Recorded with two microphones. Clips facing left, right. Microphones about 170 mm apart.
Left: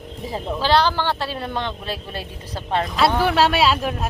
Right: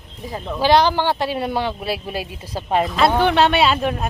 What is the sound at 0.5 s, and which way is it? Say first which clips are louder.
Speech: right 4 dB; 15° right (ahead or behind).